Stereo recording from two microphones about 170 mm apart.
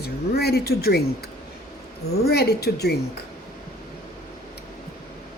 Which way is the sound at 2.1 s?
70° left (ahead or behind).